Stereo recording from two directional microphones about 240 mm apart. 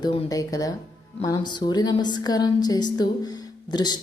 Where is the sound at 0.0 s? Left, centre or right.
Centre.